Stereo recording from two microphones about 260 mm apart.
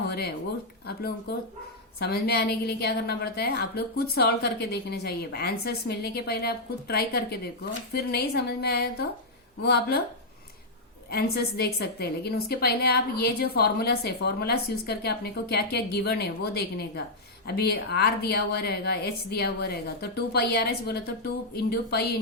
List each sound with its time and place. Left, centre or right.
2.0 s a woman's voice: left
11.1 s a woman's voice: left